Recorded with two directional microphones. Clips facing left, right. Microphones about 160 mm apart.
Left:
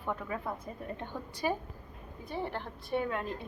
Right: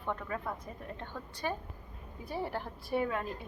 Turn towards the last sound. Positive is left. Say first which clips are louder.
# even
turn(degrees=-5)  # may be behind; listen again after turning